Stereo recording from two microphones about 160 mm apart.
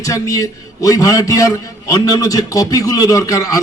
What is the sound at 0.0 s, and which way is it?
A man's voice, 20° left (ahead or behind).